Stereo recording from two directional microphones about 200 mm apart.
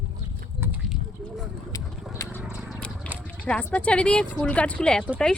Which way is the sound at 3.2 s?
5° left (ahead or behind).